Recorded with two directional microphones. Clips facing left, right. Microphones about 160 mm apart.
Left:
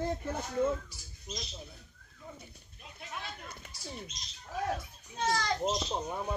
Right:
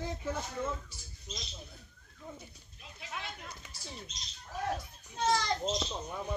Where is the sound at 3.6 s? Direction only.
55° left (ahead or behind).